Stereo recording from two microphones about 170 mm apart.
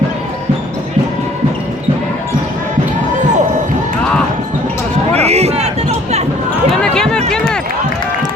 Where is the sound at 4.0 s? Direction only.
5° left (ahead or behind).